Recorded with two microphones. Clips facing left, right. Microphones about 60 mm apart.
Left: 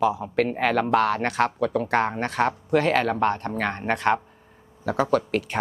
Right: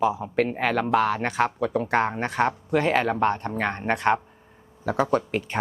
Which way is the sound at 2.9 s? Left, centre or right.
Centre.